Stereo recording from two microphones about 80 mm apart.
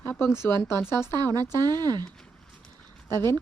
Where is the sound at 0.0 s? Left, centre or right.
Left.